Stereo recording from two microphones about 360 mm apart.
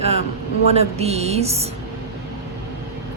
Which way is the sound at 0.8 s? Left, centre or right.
Centre.